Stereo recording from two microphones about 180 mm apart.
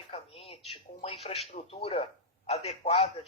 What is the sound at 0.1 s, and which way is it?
A man's voice, 35° left (ahead or behind).